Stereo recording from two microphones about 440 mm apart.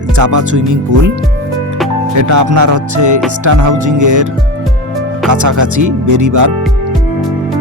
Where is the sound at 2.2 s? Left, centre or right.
Right.